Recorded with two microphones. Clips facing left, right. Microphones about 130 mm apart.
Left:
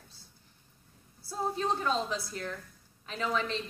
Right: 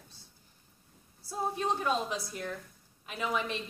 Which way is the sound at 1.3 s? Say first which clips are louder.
Left 1 dB; 15° right (ahead or behind).